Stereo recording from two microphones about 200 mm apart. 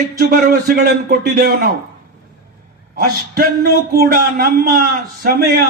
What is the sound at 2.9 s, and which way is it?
Speech, 45° right (ahead or behind).